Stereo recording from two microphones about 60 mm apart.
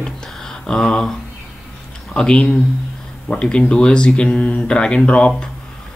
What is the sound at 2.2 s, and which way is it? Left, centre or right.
Speech, centre.